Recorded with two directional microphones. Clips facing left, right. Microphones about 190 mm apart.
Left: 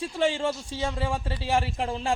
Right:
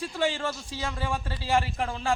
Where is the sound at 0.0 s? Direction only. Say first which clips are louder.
Left 3 dB; 25° left (ahead or behind).